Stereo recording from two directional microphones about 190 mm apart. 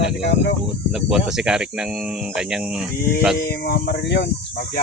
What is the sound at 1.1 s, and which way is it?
Speech, centre (ahead or behind).